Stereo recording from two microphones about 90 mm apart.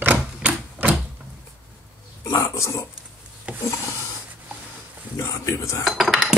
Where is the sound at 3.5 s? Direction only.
15° right (ahead or behind).